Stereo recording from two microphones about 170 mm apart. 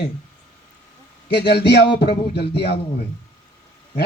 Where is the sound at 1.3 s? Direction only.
75° left (ahead or behind).